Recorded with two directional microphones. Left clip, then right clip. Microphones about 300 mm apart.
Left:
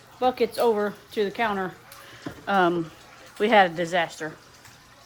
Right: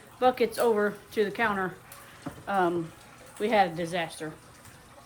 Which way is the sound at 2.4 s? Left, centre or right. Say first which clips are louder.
Left 5 dB; left.